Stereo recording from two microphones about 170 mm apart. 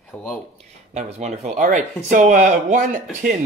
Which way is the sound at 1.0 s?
40° right (ahead or behind).